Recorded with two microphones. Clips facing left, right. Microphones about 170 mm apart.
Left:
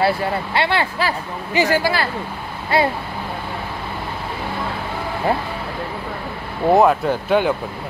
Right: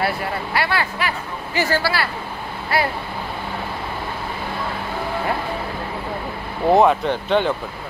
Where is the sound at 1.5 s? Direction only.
15° left (ahead or behind).